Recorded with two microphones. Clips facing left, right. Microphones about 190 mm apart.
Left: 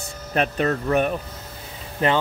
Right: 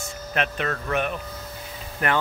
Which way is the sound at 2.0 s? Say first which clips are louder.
Left 4 dB; 25° left (ahead or behind).